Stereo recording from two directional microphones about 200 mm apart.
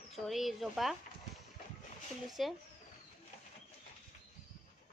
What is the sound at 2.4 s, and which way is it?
Speech, centre (ahead or behind).